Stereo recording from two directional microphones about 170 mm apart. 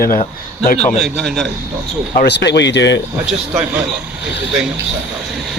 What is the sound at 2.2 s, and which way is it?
Speech, 90° left.